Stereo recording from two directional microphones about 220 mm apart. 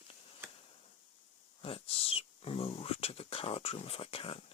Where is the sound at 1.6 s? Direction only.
25° left (ahead or behind).